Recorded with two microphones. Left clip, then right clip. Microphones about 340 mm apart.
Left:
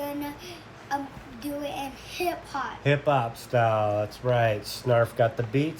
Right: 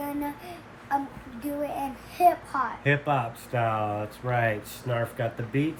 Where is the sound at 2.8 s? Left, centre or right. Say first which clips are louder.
Left 5 dB; centre.